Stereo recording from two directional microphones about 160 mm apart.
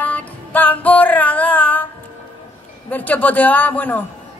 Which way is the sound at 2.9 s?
10° left (ahead or behind).